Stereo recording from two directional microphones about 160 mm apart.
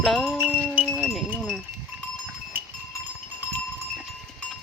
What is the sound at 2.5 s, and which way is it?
Goat, 10° right (ahead or behind).